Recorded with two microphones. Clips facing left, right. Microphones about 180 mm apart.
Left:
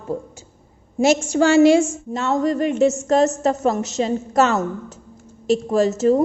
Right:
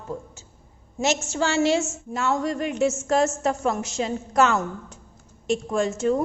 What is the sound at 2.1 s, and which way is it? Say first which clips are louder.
A woman's voice: left 1 dB; centre (ahead or behind).